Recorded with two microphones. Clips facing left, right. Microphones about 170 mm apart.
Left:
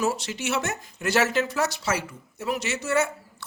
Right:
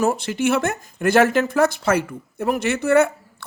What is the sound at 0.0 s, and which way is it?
Speech, 55° right (ahead or behind).